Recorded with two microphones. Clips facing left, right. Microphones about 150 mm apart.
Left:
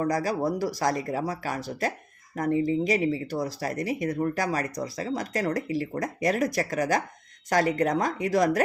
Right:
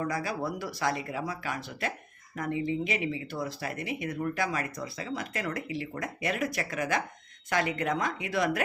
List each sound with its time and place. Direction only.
0.0 s speech: 40° left (ahead or behind)